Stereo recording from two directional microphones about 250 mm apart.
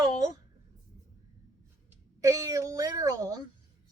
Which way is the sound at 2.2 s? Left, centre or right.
Centre.